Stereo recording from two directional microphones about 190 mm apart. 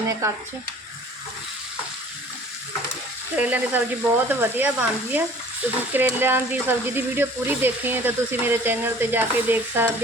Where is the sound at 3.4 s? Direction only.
10° right (ahead or behind).